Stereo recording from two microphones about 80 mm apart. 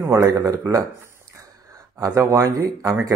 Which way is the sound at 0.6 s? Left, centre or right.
Right.